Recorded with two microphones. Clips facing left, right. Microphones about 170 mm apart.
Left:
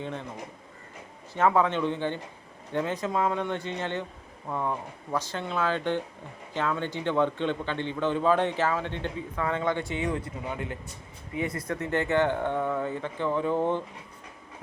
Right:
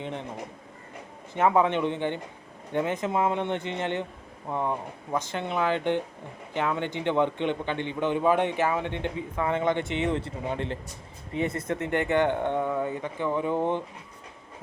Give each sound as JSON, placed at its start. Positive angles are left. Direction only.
{"t": 0.0, "sound": "speech", "side_deg": -20}
{"t": 1.3, "sound": "a man's voice", "side_deg": -20}